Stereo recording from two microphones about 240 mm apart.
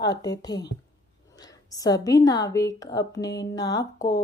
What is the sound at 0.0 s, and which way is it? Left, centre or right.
A woman's voice, centre.